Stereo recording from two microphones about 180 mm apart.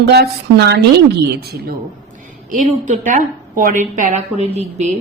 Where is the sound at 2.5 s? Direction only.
45° right (ahead or behind).